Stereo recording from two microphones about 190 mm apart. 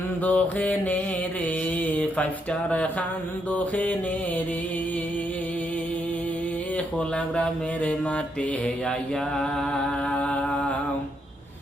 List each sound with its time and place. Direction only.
0.3 s mantra: 10° left (ahead or behind)
1.8 s a sound: 5° left (ahead or behind)
3.5 s mantra: 10° left (ahead or behind)
10.1 s humming: 5° left (ahead or behind)